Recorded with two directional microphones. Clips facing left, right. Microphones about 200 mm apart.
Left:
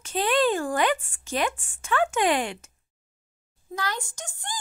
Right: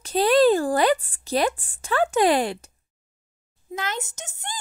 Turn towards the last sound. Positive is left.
turn(degrees=-20)  # may be behind; listen again after turning